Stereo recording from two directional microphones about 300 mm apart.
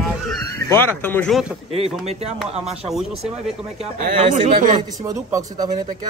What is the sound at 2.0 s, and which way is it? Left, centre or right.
A man's voice, right.